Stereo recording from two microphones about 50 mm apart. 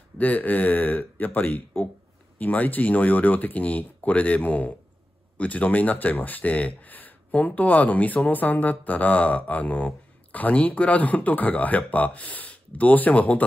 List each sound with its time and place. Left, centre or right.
0.2 s speech: left